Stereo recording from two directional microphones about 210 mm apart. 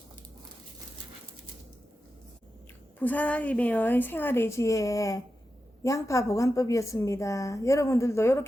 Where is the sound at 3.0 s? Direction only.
5° left (ahead or behind).